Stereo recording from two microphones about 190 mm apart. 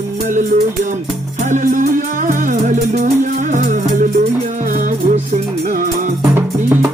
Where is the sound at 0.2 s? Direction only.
40° right (ahead or behind).